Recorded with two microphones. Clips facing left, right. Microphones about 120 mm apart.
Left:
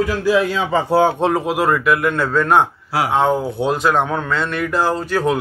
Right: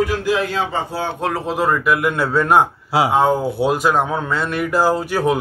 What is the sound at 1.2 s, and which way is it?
Speech, 15° left (ahead or behind).